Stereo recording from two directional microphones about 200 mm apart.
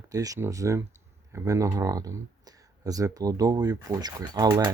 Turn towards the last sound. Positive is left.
turn(degrees=-20)  # may be behind; listen again after turning